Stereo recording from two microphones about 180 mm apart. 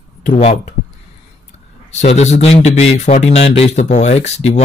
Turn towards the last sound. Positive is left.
turn(degrees=35)  # may be behind; listen again after turning